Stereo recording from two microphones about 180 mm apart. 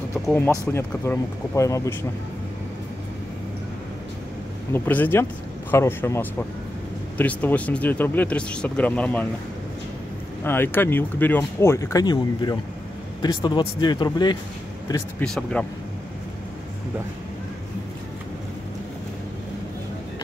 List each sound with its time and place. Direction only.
0.7 s speech: 15° left (ahead or behind)
4.7 s speech: 10° left (ahead or behind)
10.4 s speech: 10° left (ahead or behind)
15.2 s speech: 5° left (ahead or behind)